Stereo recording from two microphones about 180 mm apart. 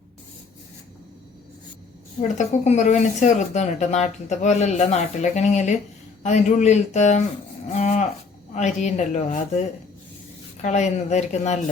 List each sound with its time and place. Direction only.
2.2 s speech: 40° left (ahead or behind)